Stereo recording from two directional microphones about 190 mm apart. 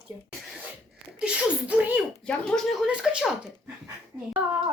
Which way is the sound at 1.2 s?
5° right (ahead or behind).